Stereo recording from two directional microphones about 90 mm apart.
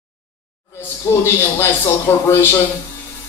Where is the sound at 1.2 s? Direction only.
25° left (ahead or behind).